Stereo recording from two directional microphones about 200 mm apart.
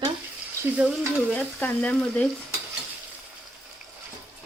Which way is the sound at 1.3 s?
5° left (ahead or behind).